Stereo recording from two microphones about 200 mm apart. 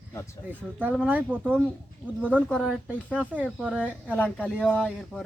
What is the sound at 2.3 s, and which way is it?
Speech, 5° left (ahead or behind).